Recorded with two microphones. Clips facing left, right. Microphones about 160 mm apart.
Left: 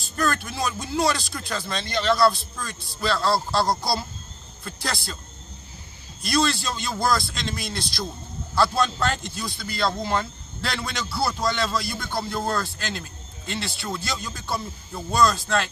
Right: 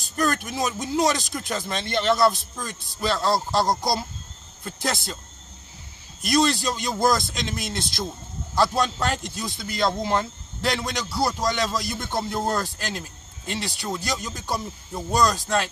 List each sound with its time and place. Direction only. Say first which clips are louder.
0.2 s speech: right 1 dB; 15° right (ahead or behind)
6.2 s a man's voice: right 2 dB; 15° right (ahead or behind)